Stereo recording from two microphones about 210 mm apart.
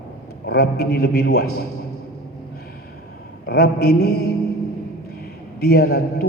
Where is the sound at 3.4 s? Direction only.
50° left (ahead or behind).